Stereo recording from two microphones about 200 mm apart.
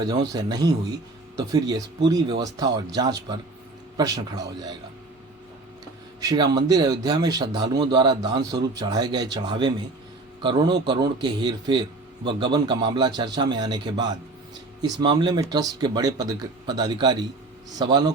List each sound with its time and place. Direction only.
0.0 s speech: 20° right (ahead or behind)
6.1 s speech: 20° right (ahead or behind)